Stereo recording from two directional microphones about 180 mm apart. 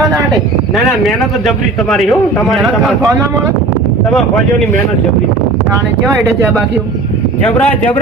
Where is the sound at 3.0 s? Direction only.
20° right (ahead or behind).